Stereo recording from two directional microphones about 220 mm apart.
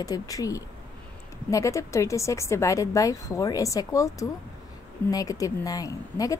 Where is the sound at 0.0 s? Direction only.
15° left (ahead or behind).